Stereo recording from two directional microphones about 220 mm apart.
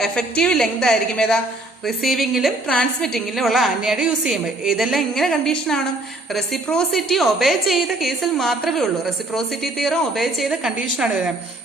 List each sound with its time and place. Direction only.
0.0 s a woman's voice: 5° left (ahead or behind)